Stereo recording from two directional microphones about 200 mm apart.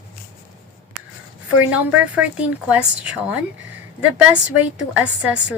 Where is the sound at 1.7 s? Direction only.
5° right (ahead or behind).